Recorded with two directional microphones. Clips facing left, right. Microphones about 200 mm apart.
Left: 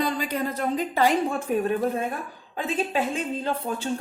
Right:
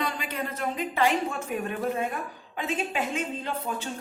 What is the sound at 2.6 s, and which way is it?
A woman's voice, 35° left (ahead or behind).